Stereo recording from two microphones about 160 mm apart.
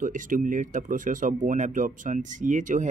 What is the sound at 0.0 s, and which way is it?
Speech, 55° right (ahead or behind).